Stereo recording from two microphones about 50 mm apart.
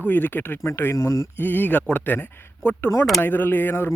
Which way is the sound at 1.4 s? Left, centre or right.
Left.